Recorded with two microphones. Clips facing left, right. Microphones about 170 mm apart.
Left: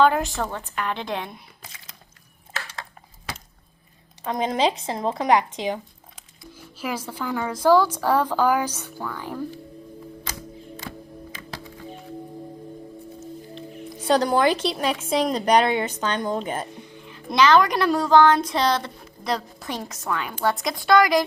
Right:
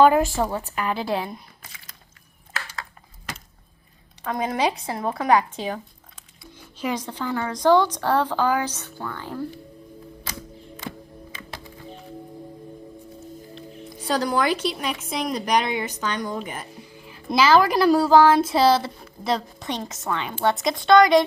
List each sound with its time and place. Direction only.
0.3 s a woman's voice: 10° right (ahead or behind)
4.2 s speech: 20° left (ahead or behind)
6.7 s a woman's voice: 5° left (ahead or behind)
14.1 s speech: 25° left (ahead or behind)
16.8 s a woman's voice: 5° right (ahead or behind)